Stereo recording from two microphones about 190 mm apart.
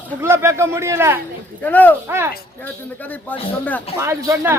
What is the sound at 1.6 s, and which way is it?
Speech, 10° left (ahead or behind).